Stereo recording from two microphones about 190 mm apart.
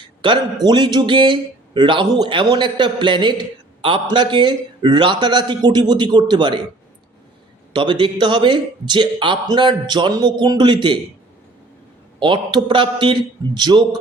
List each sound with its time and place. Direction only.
0.0 s a man's voice: 25° right (ahead or behind)
7.7 s a man's voice: 25° right (ahead or behind)
12.2 s a man's voice: 25° right (ahead or behind)